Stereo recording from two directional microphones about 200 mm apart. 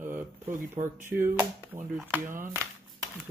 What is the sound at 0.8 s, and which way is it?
Speech, 40° right (ahead or behind).